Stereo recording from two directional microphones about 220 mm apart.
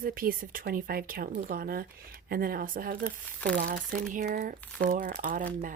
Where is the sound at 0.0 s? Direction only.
40° right (ahead or behind).